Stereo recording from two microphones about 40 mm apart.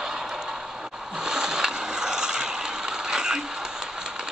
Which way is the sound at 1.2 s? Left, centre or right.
Centre.